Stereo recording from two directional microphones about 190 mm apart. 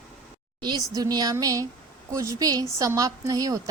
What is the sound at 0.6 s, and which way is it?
A woman's voice, 20° right (ahead or behind).